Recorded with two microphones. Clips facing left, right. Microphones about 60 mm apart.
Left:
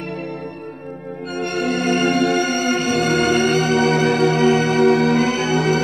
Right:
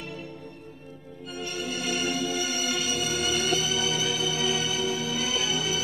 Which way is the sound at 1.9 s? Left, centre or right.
Left.